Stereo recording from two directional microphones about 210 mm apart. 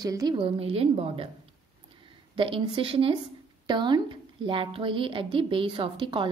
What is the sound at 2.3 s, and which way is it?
A woman's voice, 25° right (ahead or behind).